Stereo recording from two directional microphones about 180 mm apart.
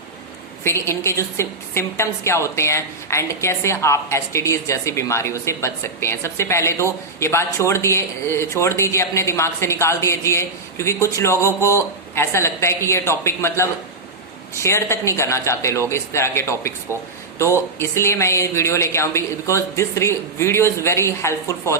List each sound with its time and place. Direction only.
0.6 s a woman's voice: 15° left (ahead or behind)
17.7 s a woman's voice: 15° left (ahead or behind)